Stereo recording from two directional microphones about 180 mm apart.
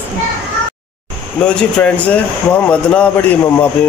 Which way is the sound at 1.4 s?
10° left (ahead or behind).